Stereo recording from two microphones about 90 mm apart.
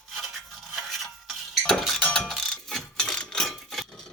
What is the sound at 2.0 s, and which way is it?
Mechanisms, 10° left (ahead or behind).